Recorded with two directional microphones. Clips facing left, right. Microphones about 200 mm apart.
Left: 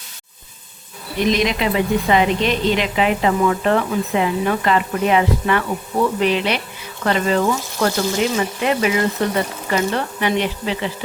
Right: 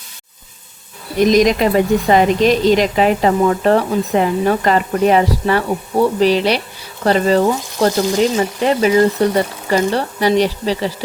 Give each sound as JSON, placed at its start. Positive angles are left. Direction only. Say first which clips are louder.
{"t": 1.2, "sound": "speech", "louder": "right 6 dB", "side_deg": -40}